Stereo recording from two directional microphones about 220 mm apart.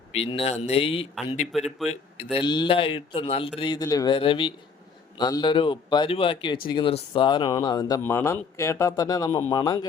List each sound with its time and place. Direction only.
0.1 s speech: 25° left (ahead or behind)
1.5 s speech: centre (ahead or behind)
1.9 s speech: 25° left (ahead or behind)